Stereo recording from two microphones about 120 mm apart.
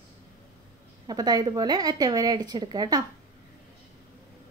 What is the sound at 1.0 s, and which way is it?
A woman's voice, 35° right (ahead or behind).